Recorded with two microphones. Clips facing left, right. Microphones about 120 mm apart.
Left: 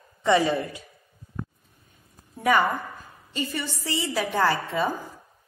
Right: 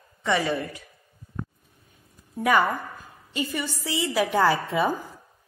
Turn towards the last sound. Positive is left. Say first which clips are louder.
# right 2 dB
turn(degrees=-15)  # may be behind; listen again after turning